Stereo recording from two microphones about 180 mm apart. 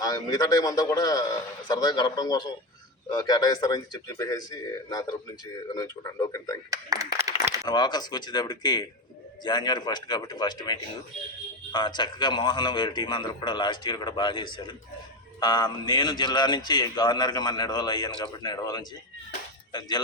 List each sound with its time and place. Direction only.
0.0 s a man's voice: 20° left (ahead or behind)
6.7 s speech: 20° right (ahead or behind)
7.6 s a man's voice: 25° left (ahead or behind)